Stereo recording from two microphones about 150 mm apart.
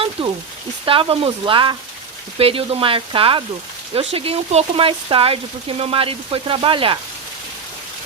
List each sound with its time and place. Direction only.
0.2 s speech: 35° right (ahead or behind)